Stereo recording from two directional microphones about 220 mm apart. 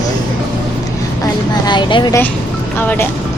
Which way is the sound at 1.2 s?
20° left (ahead or behind).